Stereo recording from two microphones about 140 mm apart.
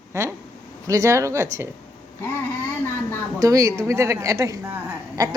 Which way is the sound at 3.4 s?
25° right (ahead or behind).